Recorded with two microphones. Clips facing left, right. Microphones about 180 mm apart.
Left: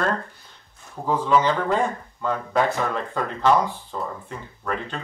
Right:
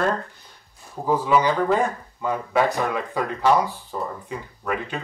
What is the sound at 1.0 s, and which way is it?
Speech, 10° right (ahead or behind).